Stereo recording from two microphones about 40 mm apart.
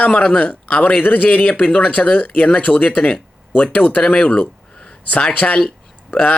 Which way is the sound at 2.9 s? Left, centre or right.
Left.